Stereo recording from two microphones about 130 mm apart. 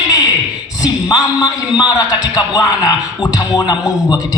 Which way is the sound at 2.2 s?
30° left (ahead or behind).